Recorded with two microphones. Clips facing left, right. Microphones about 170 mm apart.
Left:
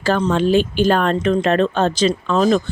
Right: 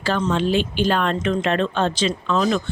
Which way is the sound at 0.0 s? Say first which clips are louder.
Left 4 dB; 40° left (ahead or behind).